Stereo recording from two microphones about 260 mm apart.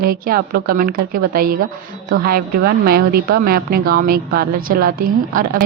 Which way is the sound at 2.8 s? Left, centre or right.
Right.